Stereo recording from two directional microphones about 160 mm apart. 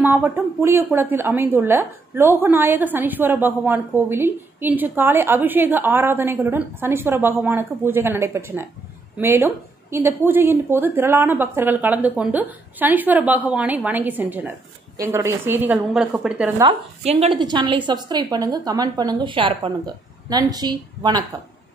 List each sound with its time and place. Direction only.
0.0 s a woman's voice: 10° right (ahead or behind)
16.6 s a woman's voice: 40° right (ahead or behind)